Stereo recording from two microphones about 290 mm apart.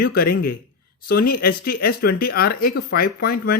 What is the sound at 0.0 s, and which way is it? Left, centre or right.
Speech, left.